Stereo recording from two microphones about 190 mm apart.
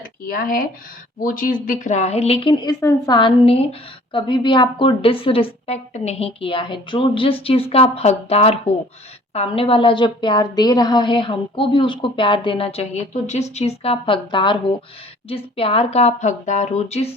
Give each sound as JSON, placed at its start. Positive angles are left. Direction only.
{"t": 0.3, "sound": "a woman's voice", "side_deg": 50}